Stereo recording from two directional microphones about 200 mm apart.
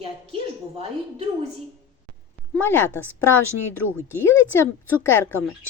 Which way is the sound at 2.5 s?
10° left (ahead or behind).